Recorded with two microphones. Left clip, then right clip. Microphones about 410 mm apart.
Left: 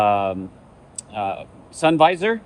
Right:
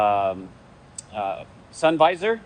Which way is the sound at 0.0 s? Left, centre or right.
Left.